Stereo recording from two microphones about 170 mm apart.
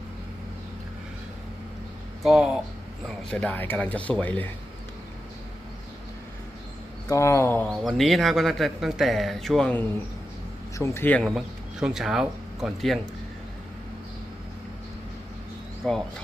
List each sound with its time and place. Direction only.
2.2 s speech: 5° right (ahead or behind)
7.1 s speech: 15° left (ahead or behind)
7.7 s speech: centre (ahead or behind)
11.2 s speech: 5° right (ahead or behind)
15.8 s speech: centre (ahead or behind)